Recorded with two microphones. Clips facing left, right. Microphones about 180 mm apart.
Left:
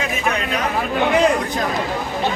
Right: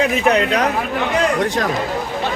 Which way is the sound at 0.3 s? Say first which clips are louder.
Right 5 dB; 75° right (ahead or behind).